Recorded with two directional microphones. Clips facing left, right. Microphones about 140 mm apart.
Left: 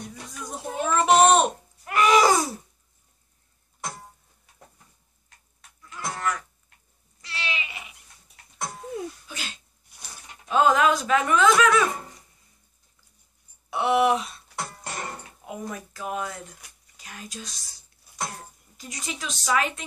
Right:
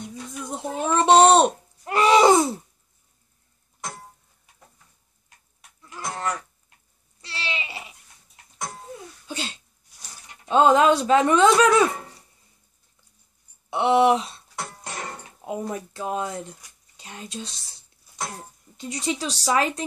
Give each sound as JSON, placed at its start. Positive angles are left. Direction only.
{"t": 0.4, "sound": "a sound", "side_deg": -25}
{"t": 5.9, "sound": "goat", "side_deg": -35}
{"t": 7.2, "sound": "a sound", "side_deg": -30}
{"t": 8.5, "sound": "babbling", "side_deg": 5}
{"t": 9.3, "sound": "a sound", "side_deg": -30}
{"t": 10.5, "sound": "speech", "side_deg": -30}
{"t": 13.7, "sound": "speech", "side_deg": -25}
{"t": 14.7, "sound": "music", "side_deg": 5}
{"t": 15.4, "sound": "speech", "side_deg": -25}